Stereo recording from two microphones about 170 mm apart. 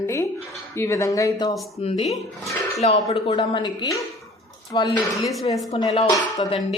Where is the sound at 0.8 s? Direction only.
15° left (ahead or behind).